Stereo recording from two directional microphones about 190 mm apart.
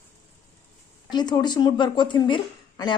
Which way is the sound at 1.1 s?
20° left (ahead or behind).